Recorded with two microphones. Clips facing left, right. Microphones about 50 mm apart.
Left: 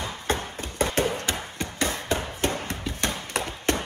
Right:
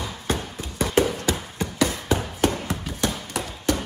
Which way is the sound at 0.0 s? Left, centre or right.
Left.